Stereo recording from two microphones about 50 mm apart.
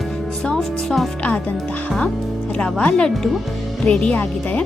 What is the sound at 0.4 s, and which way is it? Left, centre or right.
Speech, centre.